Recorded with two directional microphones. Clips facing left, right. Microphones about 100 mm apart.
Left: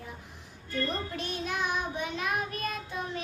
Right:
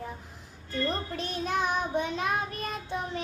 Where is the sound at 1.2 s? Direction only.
35° right (ahead or behind).